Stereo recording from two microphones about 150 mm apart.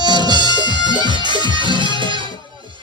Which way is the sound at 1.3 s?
30° right (ahead or behind).